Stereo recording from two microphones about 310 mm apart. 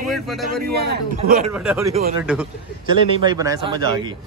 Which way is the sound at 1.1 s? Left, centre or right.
Right.